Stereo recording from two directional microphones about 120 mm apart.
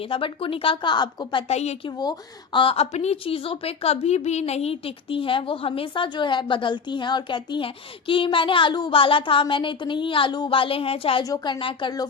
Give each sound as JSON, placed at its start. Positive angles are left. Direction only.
{"t": 0.1, "sound": "a woman's voice", "side_deg": 50}
{"t": 1.5, "sound": "a woman's voice", "side_deg": 65}
{"t": 2.0, "sound": "speech", "side_deg": 35}
{"t": 2.9, "sound": "a woman's voice", "side_deg": 65}
{"t": 11.2, "sound": "a woman's voice", "side_deg": 35}